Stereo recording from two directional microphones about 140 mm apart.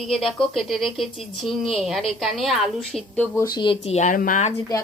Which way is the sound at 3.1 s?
15° left (ahead or behind).